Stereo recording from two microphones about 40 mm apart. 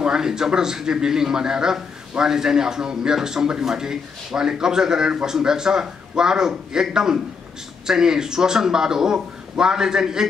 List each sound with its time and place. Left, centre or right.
0.0 s a man's voice: centre